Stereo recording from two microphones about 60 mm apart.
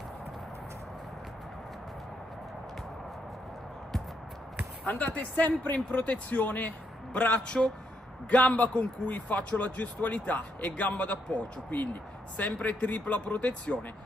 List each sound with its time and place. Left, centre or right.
4.8 s speech: left